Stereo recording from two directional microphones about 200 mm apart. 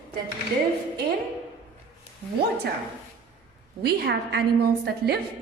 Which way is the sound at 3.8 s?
55° right (ahead or behind).